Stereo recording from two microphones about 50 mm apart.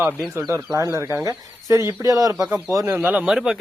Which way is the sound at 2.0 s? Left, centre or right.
Right.